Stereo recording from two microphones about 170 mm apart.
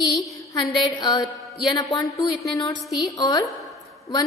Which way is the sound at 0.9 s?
25° left (ahead or behind).